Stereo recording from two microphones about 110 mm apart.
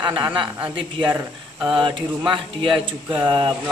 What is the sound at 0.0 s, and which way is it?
Speech, 45° right (ahead or behind).